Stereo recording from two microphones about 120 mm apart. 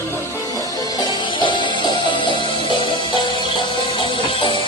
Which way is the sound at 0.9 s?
35° left (ahead or behind).